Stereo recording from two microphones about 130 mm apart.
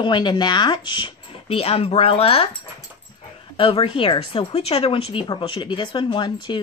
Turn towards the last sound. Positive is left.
turn(degrees=35)  # may be behind; listen again after turning